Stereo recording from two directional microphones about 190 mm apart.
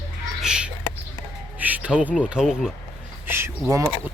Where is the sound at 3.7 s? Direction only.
15° right (ahead or behind).